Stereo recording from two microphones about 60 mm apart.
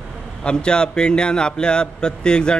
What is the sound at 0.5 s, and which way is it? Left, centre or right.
A man's voice, centre.